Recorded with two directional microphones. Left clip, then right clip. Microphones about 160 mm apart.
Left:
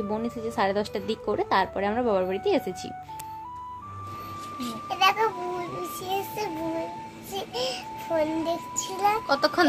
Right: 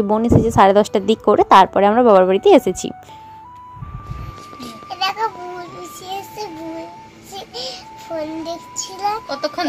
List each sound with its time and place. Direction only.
0.1 s a woman's voice: 45° right (ahead or behind)
4.8 s child singing: 10° left (ahead or behind)
9.3 s a child's voice: 25° left (ahead or behind)